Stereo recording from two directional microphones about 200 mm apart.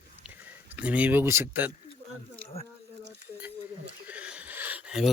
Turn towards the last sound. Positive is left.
turn(degrees=-5)  # may be behind; listen again after turning